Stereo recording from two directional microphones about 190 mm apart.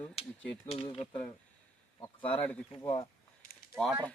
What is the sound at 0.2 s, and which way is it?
Speech, 30° left (ahead or behind).